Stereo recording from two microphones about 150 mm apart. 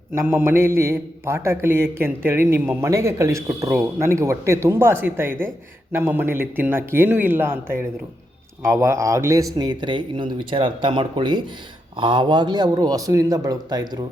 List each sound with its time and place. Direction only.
0.1 s speech: 15° right (ahead or behind)